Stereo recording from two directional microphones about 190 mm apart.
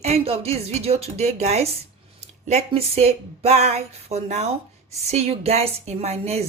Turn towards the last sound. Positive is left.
turn(degrees=-35)  # may be behind; listen again after turning